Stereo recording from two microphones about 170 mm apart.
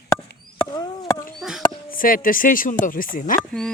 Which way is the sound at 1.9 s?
55° left (ahead or behind).